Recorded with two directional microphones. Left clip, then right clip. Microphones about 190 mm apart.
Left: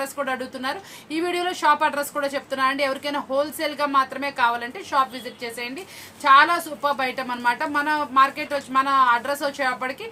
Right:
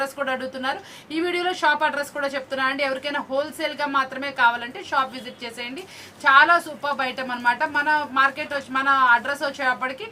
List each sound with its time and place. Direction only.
0.0 s a woman's voice: 15° left (ahead or behind)